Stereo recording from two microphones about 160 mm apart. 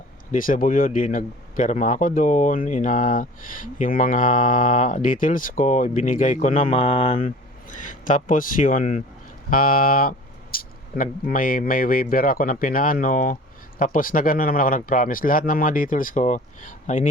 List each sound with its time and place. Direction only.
0.3 s speech: 60° left (ahead or behind)